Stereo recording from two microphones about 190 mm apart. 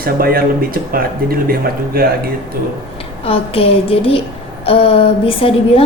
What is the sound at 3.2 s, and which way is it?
A woman's voice, 30° left (ahead or behind).